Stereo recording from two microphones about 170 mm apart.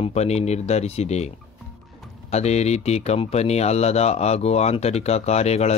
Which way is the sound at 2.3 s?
40° left (ahead or behind).